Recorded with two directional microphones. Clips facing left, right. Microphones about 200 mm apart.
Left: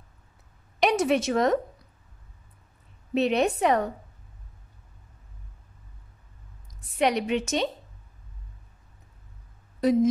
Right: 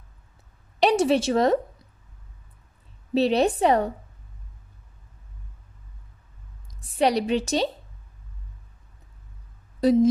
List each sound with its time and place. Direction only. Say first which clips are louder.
0.7 s a woman's voice: right 3 dB; 30° right (ahead or behind)
3.2 s a woman's voice: right 3 dB; 30° right (ahead or behind)
7.0 s a woman's voice: right 3 dB; 35° right (ahead or behind)
9.8 s a woman's voice: right 3 dB; 30° right (ahead or behind)